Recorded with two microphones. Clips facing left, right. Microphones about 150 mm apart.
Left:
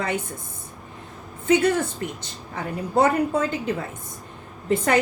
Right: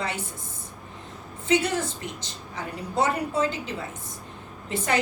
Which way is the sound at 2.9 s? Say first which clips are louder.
Left 5 dB; 55° left (ahead or behind).